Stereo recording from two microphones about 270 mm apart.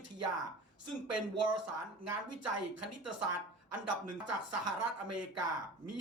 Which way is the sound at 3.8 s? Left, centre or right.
Right.